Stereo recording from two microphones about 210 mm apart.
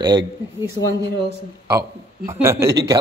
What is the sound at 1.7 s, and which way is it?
Speech, 15° right (ahead or behind).